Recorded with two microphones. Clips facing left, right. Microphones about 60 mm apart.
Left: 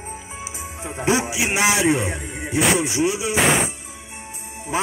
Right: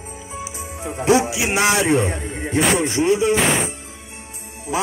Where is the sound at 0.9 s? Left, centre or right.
Left.